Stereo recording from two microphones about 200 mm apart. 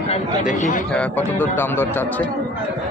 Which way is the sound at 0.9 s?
10° left (ahead or behind).